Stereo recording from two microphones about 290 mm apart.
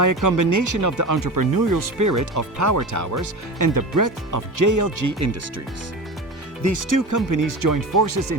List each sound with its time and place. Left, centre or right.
0.0 s speech: right
6.6 s speech: right